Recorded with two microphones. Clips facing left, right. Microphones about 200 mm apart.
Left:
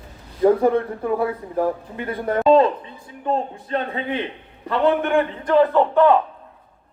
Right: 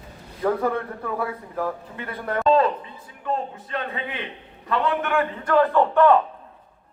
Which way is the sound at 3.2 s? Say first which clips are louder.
Left 4 dB; 35° left (ahead or behind).